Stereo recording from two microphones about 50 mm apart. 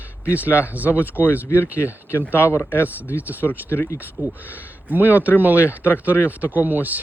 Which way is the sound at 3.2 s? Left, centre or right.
Right.